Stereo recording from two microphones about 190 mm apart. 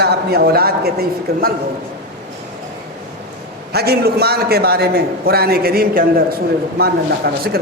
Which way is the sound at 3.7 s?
55° right (ahead or behind).